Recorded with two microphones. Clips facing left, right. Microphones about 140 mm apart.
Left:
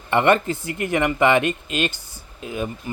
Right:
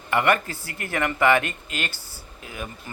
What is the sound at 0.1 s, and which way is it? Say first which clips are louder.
Speech: left 4 dB; 25° left (ahead or behind).